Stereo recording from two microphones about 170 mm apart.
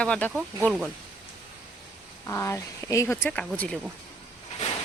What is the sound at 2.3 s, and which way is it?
Speech, 15° left (ahead or behind).